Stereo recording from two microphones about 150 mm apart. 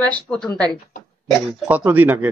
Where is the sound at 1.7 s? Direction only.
10° right (ahead or behind).